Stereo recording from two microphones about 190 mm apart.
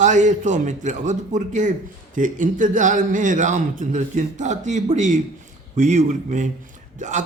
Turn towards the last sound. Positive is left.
turn(degrees=-40)  # may be behind; listen again after turning